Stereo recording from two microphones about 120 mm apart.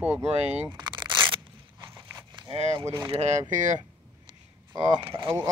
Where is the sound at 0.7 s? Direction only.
40° right (ahead or behind).